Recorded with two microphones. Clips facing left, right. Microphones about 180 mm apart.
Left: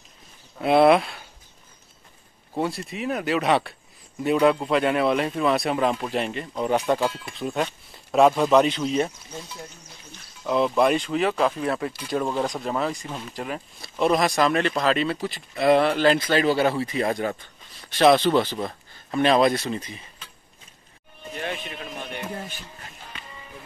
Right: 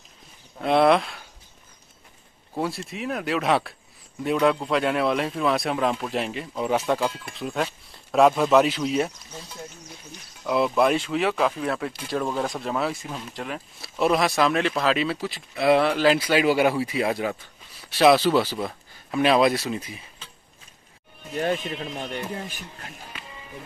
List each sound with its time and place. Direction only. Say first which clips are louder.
0.6 s speech: left 2 dB; 5° left (ahead or behind)
2.5 s speech: left 1 dB; centre (ahead or behind)
10.4 s speech: left 1 dB; 5° right (ahead or behind)
21.4 s speech: right 7 dB; 40° right (ahead or behind)